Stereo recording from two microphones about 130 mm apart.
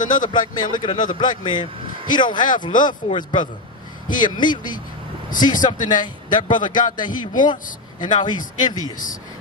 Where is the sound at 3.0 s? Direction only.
55° left (ahead or behind).